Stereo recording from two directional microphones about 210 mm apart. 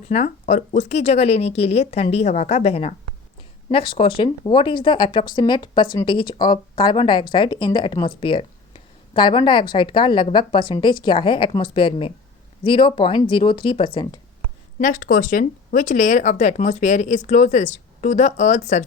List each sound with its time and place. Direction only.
0.1 s speech: 35° left (ahead or behind)
14.8 s speech: 40° left (ahead or behind)